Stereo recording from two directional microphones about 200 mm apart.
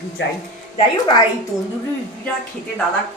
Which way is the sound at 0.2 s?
60° left (ahead or behind).